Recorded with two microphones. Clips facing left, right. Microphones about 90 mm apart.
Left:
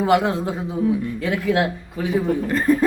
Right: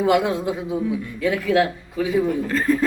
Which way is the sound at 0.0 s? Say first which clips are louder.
Even; 35° left (ahead or behind).